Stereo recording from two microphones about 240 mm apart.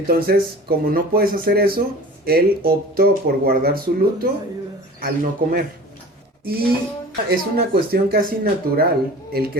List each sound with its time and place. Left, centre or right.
0.1 s speech: right
6.4 s a sound: right
7.3 s speech: right